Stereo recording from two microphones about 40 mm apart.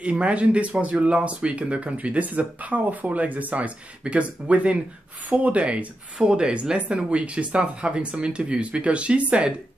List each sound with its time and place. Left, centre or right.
0.0 s speech: right